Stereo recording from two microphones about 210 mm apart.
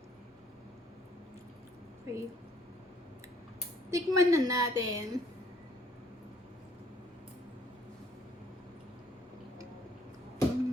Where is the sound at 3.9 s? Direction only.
15° right (ahead or behind).